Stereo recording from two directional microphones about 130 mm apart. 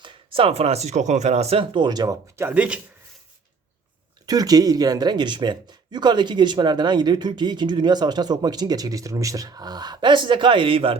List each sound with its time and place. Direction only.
0.0 s speech: 45° right (ahead or behind); by 2.8 s 10° right (ahead or behind)
4.3 s speech: 30° right (ahead or behind)